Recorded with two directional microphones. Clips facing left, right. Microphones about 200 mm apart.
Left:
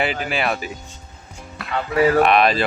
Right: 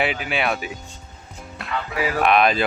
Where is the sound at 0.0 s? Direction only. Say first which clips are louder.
Left 1 dB; centre (ahead or behind).